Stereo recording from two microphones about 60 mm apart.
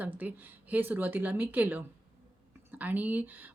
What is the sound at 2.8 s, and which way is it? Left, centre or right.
Speech, right.